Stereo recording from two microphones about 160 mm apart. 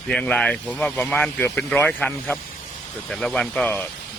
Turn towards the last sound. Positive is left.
turn(degrees=10)  # may be behind; listen again after turning